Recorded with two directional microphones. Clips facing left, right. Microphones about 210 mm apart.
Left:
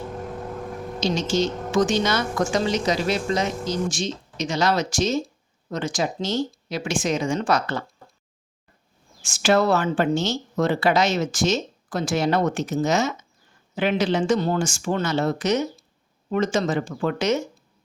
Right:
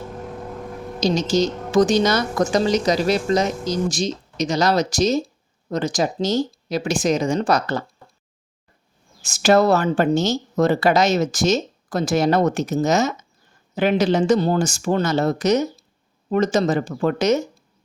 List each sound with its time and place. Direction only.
0.9 s a woman's voice: 40° right (ahead or behind)
9.2 s a woman's voice: 40° right (ahead or behind)